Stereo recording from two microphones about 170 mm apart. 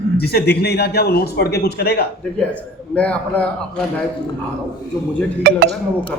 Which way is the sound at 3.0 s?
10° left (ahead or behind).